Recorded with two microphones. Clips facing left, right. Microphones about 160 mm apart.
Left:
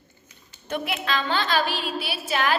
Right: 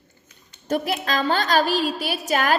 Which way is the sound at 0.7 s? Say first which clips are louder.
Right 4 dB; 40° right (ahead or behind).